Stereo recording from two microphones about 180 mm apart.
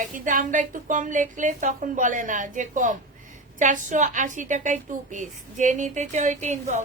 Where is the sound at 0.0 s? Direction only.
45° right (ahead or behind).